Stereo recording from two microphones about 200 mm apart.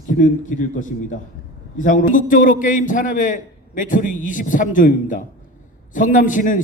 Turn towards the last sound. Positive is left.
turn(degrees=40)  # may be behind; listen again after turning